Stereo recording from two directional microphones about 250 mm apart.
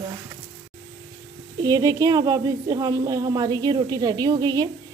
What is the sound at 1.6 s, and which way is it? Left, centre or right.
A woman's voice, centre.